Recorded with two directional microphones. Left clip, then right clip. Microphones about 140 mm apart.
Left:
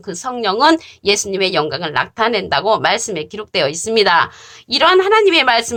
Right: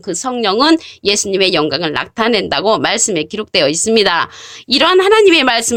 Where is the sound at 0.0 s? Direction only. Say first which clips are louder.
Right 3 dB; 45° right (ahead or behind).